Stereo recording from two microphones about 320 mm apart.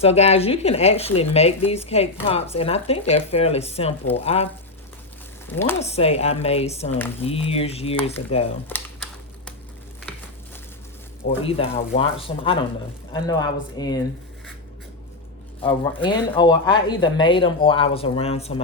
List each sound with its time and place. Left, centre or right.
0.0 s speech: centre
5.5 s speech: centre
5.8 s speech: centre
8.7 s a sound: centre
11.3 s speech: centre
15.6 s speech: centre